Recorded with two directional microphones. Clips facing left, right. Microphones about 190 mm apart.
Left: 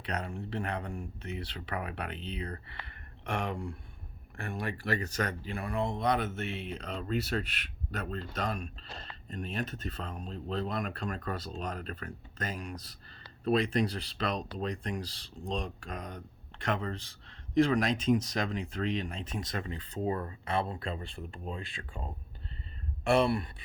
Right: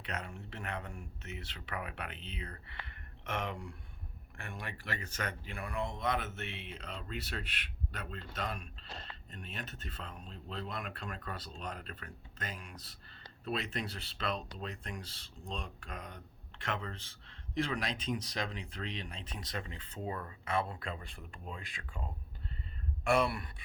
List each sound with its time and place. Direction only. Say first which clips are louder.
0.0 s speech: left 6 dB; 35° left (ahead or behind)
23.0 s speech: left 4 dB; 30° left (ahead or behind)